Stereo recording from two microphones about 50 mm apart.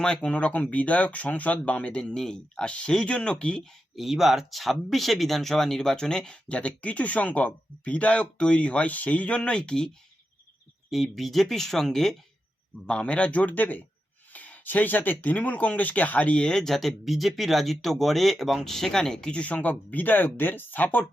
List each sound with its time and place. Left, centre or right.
0.0 s speech: centre
3.6 s speech: centre
6.5 s speech: left
10.9 s speech: centre
12.9 s speech: left